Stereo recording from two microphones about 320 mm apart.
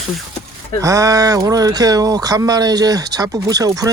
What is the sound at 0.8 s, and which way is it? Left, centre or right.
Speech, centre.